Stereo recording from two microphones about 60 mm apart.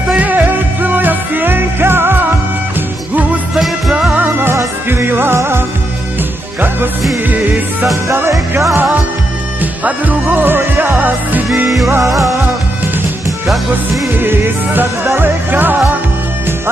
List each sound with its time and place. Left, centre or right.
0.1 s music: right
4.2 s music: right
7.8 s music: right
9.6 s music: right
14.1 s music: right